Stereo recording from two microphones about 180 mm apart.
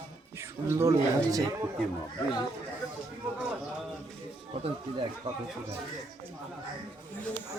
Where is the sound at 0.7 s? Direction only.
15° right (ahead or behind).